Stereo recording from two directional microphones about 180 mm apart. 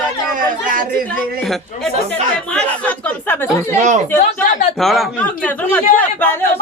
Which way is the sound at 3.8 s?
40° right (ahead or behind).